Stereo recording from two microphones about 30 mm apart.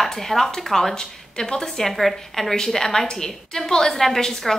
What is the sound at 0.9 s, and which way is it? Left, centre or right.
Speech, left.